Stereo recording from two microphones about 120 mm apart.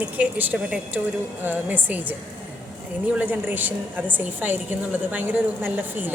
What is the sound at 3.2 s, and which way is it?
A woman's voice, 15° right (ahead or behind).